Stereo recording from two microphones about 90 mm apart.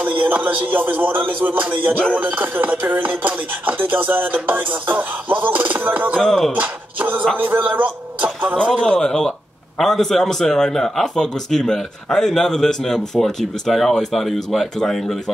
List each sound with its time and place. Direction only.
0.0 s music: 20° right (ahead or behind)
6.1 s a man's voice: 5° left (ahead or behind)
6.5 s speech: 20° right (ahead or behind)
8.6 s a man's voice: 5° left (ahead or behind)